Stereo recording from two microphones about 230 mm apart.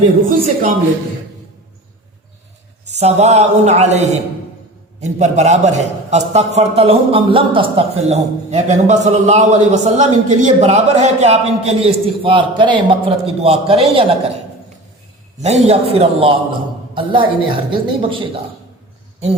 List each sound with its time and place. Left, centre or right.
0.3 s speech: right
2.9 s a man's voice: right
15.4 s a man's voice: right